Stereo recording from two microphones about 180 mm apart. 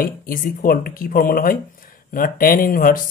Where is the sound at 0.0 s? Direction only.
50° left (ahead or behind).